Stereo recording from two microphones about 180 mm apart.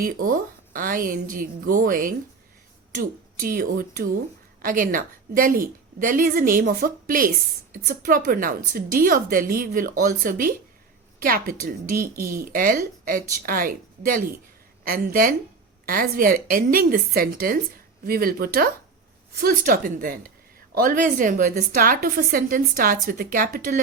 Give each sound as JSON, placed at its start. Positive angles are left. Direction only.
{"t": 0.0, "sound": "a woman's voice", "side_deg": -50}